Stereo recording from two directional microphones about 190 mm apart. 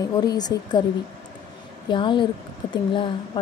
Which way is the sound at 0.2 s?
20° left (ahead or behind).